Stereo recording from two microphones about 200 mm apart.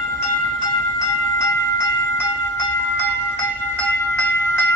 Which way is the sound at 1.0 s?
15° left (ahead or behind).